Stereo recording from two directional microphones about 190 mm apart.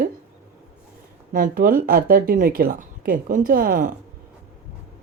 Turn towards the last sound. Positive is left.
turn(degrees=-45)  # may be behind; listen again after turning